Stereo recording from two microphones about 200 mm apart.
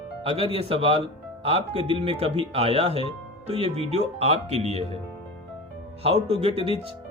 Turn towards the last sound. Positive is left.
turn(degrees=-30)  # may be behind; listen again after turning